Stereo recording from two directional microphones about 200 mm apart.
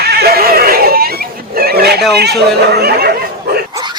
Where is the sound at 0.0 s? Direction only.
50° right (ahead or behind).